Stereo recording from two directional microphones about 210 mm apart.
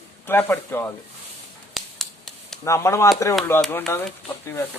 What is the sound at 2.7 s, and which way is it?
Speech, 15° left (ahead or behind).